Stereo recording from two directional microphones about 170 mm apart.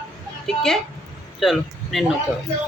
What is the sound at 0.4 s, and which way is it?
A woman's voice, centre (ahead or behind).